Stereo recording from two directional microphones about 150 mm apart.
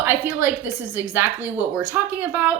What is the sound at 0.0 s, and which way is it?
Speech, 15° right (ahead or behind).